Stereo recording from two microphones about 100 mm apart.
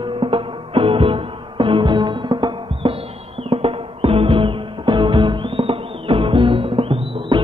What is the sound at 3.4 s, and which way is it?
Music, 70° right (ahead or behind).